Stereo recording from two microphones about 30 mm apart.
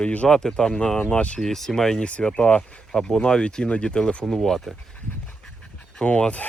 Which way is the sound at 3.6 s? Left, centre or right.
Left.